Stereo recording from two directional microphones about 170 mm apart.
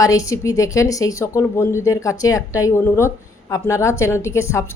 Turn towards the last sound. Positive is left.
turn(degrees=15)  # may be behind; listen again after turning